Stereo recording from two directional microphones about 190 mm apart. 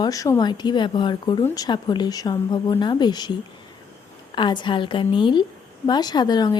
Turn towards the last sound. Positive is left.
turn(degrees=20)  # may be behind; listen again after turning